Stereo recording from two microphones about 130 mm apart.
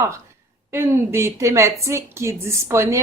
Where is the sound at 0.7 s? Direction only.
20° right (ahead or behind).